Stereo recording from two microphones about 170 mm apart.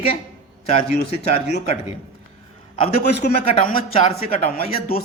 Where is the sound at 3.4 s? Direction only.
35° left (ahead or behind).